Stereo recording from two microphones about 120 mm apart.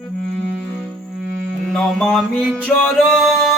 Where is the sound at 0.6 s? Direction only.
Centre (ahead or behind).